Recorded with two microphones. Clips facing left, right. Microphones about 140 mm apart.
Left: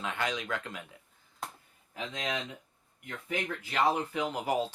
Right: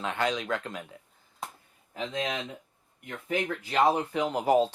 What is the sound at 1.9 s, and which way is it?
Speech, 30° right (ahead or behind).